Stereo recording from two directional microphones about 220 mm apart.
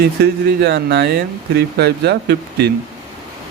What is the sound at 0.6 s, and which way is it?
Speech, 50° right (ahead or behind).